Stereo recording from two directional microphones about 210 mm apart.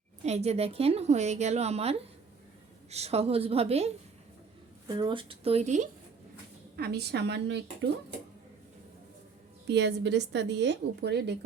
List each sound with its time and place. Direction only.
0.2 s a woman's voice: 30° right (ahead or behind)
6.7 s a woman's voice: 50° right (ahead or behind)
9.6 s a woman's voice: 55° right (ahead or behind)